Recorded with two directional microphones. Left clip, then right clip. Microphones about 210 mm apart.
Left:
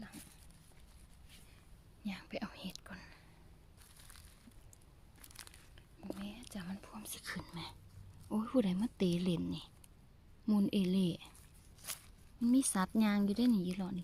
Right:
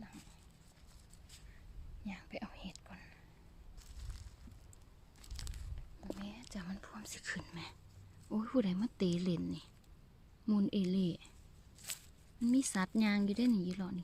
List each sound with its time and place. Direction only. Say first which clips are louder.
2.0 s whispering: left 3 dB; 20° left (ahead or behind)
6.1 s whispering: even; centre (ahead or behind)
8.3 s a woman's voice: left 1 dB; 5° left (ahead or behind)
12.5 s a woman's voice: left 1 dB; 5° left (ahead or behind)